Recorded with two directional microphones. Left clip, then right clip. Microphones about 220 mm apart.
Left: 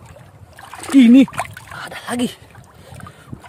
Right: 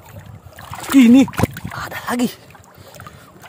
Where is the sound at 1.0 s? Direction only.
5° right (ahead or behind).